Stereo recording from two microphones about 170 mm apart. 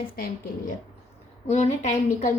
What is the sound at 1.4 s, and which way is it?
Speech, 40° left (ahead or behind).